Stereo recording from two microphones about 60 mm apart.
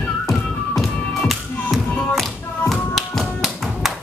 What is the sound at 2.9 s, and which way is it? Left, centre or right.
Tap, centre.